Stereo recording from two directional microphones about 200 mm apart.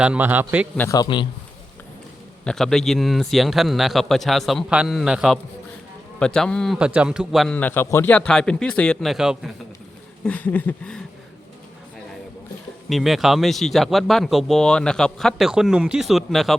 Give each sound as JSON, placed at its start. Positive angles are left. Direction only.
{"t": 0.0, "sound": "a man's voice", "side_deg": -5}
{"t": 0.8, "sound": "a man's voice", "side_deg": 15}
{"t": 2.4, "sound": "speech", "side_deg": 5}
{"t": 10.2, "sound": "a sound", "side_deg": 10}
{"t": 12.9, "sound": "speech", "side_deg": 0}